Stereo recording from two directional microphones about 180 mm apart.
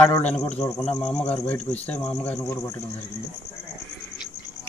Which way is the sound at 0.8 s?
5° left (ahead or behind).